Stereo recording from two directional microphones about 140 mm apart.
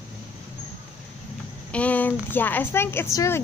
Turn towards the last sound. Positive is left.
turn(degrees=20)  # may be behind; listen again after turning